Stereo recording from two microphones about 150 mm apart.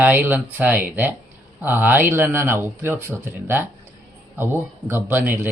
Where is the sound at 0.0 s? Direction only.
10° right (ahead or behind).